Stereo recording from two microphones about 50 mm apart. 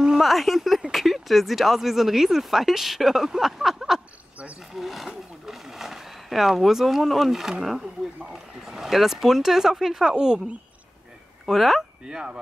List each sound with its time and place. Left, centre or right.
0.2 s speech: centre
4.7 s a sound: centre
8.3 s speech: centre
11.4 s speech: centre
12.0 s speech: centre